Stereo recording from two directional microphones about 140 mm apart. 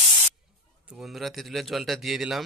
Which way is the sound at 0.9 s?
Centre (ahead or behind).